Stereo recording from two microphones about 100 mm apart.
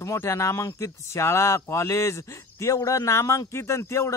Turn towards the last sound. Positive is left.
turn(degrees=30)  # may be behind; listen again after turning